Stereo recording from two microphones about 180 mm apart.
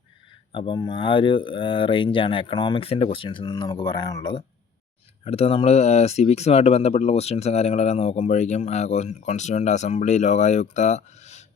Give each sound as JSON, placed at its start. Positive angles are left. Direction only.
{"t": 0.5, "sound": "speech", "side_deg": 25}